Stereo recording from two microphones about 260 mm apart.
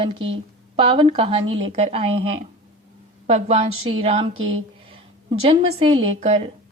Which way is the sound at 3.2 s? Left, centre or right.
Right.